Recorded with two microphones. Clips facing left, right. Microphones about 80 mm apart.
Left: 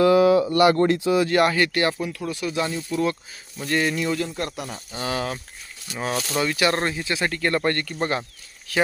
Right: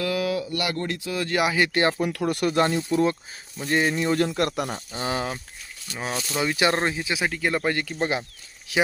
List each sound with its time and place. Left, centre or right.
0.0 s speech: left
1.3 s speech: centre
1.5 s speech: right
2.0 s speech: right
2.2 s speech: right
2.9 s speech: right
4.2 s speech: right
4.9 s speech: right
6.0 s speech: centre
6.4 s speech: right
7.9 s speech: centre